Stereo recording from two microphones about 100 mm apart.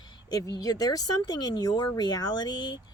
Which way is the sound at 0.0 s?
45° left (ahead or behind).